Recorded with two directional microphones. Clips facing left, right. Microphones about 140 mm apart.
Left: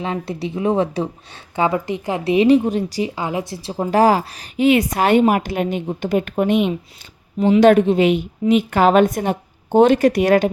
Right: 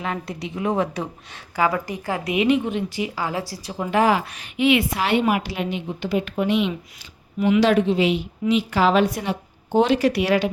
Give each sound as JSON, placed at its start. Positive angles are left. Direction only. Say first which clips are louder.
{"t": 0.0, "sound": "a woman's voice", "louder": "left 4 dB", "side_deg": 30}
{"t": 3.2, "sound": "a woman's voice", "louder": "left 3 dB", "side_deg": 20}
{"t": 7.3, "sound": "a woman's voice", "louder": "left 4 dB", "side_deg": 30}
{"t": 7.6, "sound": "a woman's voice", "louder": "left 8 dB", "side_deg": 50}